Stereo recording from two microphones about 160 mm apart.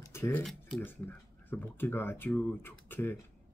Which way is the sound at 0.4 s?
5° left (ahead or behind).